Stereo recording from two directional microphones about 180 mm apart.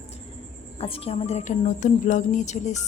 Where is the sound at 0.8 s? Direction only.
30° left (ahead or behind).